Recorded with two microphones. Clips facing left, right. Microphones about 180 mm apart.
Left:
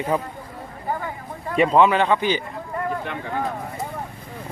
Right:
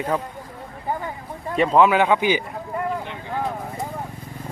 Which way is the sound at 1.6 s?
Centre (ahead or behind).